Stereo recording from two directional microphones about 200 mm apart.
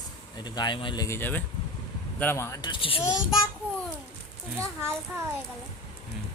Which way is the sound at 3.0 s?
5° right (ahead or behind).